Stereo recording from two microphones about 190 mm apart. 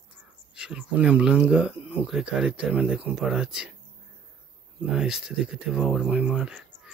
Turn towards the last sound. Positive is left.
turn(degrees=-5)  # may be behind; listen again after turning